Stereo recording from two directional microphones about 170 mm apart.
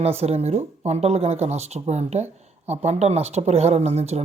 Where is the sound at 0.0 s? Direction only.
35° right (ahead or behind).